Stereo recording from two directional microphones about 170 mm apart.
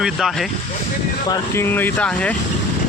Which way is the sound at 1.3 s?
15° left (ahead or behind).